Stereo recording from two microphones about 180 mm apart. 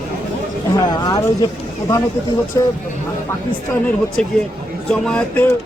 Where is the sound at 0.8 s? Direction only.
25° left (ahead or behind).